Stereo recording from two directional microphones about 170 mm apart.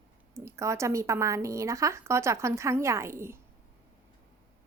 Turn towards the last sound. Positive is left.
turn(degrees=-15)  # may be behind; listen again after turning